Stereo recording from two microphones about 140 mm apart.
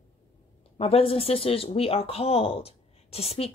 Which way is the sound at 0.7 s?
45° left (ahead or behind).